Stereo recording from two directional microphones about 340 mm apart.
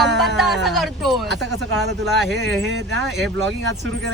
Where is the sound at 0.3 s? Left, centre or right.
Centre.